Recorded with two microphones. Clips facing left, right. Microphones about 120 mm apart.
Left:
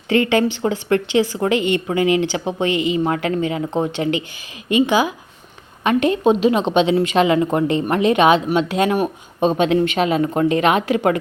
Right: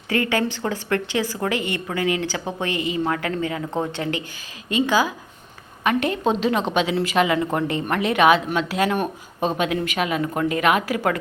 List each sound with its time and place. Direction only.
0.1 s a woman's voice: 20° left (ahead or behind)